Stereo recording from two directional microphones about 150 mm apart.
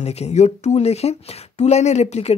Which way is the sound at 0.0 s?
45° left (ahead or behind).